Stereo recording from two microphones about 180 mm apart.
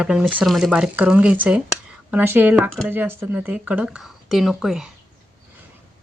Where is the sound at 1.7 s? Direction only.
10° right (ahead or behind).